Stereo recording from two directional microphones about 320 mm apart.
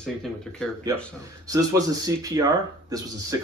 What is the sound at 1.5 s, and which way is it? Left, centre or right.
Speech, centre.